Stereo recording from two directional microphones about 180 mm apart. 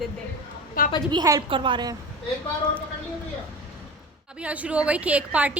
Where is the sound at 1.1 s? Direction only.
20° right (ahead or behind).